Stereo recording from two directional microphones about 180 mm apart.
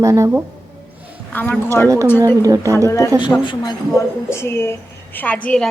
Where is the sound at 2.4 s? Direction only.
20° right (ahead or behind).